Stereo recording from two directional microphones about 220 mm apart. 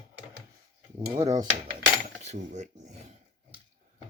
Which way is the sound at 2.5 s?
30° right (ahead or behind).